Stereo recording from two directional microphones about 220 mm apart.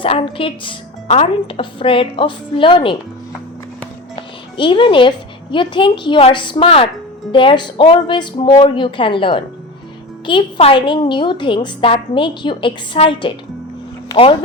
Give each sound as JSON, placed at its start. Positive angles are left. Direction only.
{"t": 0.0, "sound": "a woman's voice", "side_deg": 25}
{"t": 4.1, "sound": "a woman's voice", "side_deg": 25}